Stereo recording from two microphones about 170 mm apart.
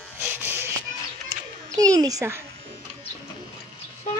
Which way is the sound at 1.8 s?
20° right (ahead or behind).